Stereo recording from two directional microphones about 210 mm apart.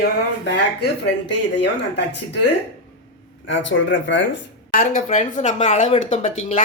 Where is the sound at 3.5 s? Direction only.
60° left (ahead or behind).